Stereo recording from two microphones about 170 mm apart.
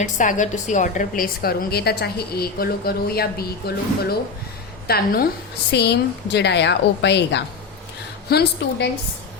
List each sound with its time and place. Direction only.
0.0 s a woman's voice: 45° left (ahead or behind); by 3.8 s 65° left (ahead or behind)
4.9 s a woman's voice: 65° left (ahead or behind)
5.7 s a woman's voice: 75° left (ahead or behind)
8.3 s a woman's voice: 70° left (ahead or behind)